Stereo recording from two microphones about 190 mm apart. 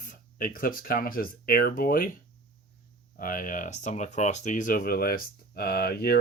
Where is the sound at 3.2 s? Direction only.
45° left (ahead or behind).